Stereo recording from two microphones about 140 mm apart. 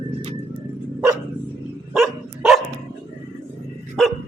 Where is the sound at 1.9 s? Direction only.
Centre (ahead or behind).